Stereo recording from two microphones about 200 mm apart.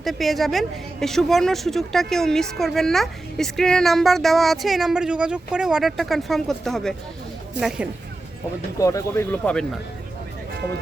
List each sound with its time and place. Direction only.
0.0 s a woman's voice: centre (ahead or behind)
8.8 s speech: 15° left (ahead or behind)